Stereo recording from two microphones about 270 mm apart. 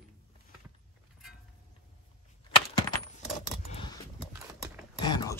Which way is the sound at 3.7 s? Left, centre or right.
Centre.